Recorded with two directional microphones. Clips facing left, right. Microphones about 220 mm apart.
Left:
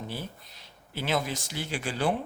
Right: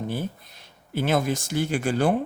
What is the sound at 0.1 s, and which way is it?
Speech, 50° right (ahead or behind).